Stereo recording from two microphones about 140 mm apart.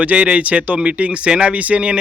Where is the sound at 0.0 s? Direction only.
10° right (ahead or behind).